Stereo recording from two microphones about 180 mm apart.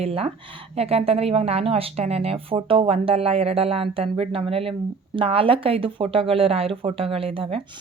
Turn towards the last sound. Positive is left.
turn(degrees=-30)  # may be behind; listen again after turning